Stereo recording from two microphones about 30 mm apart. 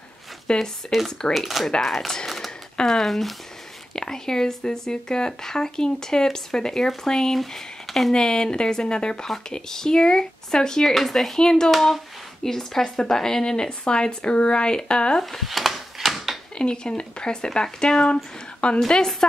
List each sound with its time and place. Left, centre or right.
0.5 s speech: left
0.9 s speech: centre
2.0 s speech: centre
2.2 s a sound: centre
2.8 s speech: centre
3.9 s speech: left
7.3 s speech: centre
8.1 s speech: left
9.5 s speech: left
11.0 s speech: centre
11.3 s speech: left
15.4 s a sound: centre
16.5 s a woman's voice: left